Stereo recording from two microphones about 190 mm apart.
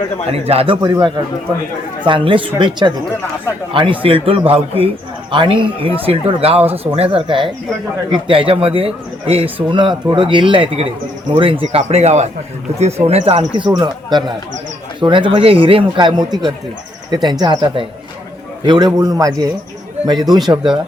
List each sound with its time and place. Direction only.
0.3 s a man's voice: 30° right (ahead or behind)
0.8 s speech: 20° right (ahead or behind)